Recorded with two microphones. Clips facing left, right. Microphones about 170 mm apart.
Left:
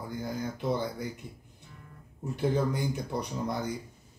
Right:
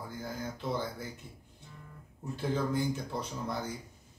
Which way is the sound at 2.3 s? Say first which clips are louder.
Left 3 dB; 20° left (ahead or behind).